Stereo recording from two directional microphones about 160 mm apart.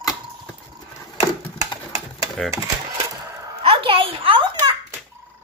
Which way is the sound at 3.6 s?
35° right (ahead or behind).